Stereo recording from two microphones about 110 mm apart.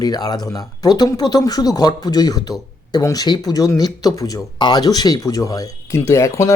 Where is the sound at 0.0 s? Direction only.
35° left (ahead or behind).